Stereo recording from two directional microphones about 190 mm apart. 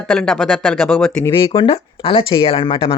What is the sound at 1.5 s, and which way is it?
Speech, 30° left (ahead or behind).